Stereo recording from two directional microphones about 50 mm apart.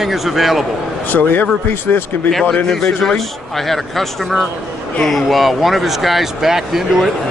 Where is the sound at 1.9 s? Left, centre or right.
Left.